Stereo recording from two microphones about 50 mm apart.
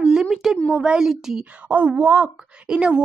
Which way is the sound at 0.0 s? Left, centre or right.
Centre.